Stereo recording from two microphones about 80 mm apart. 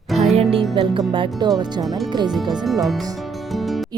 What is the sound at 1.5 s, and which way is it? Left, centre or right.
Speech, right.